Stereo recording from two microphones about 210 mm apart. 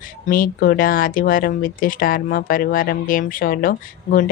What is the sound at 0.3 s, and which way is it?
Speech, 40° left (ahead or behind).